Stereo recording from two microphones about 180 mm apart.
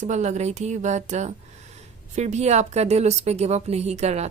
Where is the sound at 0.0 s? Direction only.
40° right (ahead or behind).